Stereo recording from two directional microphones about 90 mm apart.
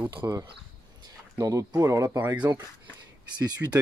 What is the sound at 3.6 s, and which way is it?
Speech, 30° right (ahead or behind).